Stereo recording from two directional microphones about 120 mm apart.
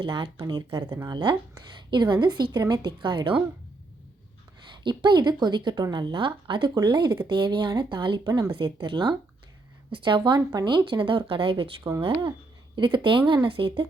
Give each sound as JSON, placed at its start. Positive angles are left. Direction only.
{"t": 0.0, "sound": "a woman's voice", "side_deg": -45}
{"t": 4.7, "sound": "a woman's voice", "side_deg": -40}